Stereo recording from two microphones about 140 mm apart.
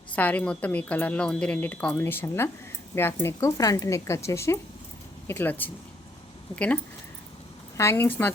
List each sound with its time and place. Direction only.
0.2 s a woman's voice: 10° left (ahead or behind)
6.5 s speech: 40° left (ahead or behind)
7.8 s a woman's voice: 15° left (ahead or behind)